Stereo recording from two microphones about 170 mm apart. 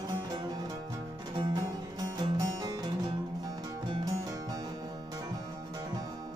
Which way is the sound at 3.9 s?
20° right (ahead or behind).